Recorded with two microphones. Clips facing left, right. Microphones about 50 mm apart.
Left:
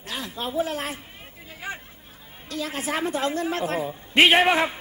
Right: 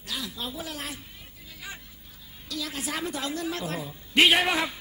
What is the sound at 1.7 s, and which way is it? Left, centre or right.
Chatter, left.